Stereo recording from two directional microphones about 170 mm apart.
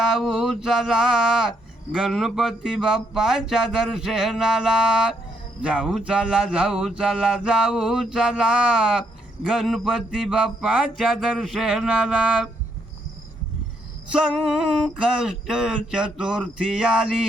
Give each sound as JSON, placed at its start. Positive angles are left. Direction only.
{"t": 0.0, "sound": "mantra", "side_deg": 0}
{"t": 14.1, "sound": "mantra", "side_deg": -5}